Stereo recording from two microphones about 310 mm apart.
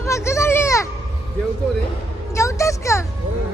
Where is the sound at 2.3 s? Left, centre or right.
Centre.